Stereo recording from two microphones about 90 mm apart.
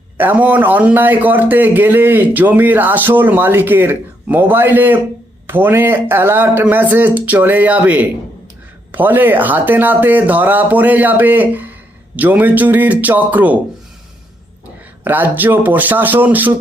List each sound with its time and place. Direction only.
0.2 s a man's voice: 20° right (ahead or behind)
15.0 s a man's voice: 20° right (ahead or behind)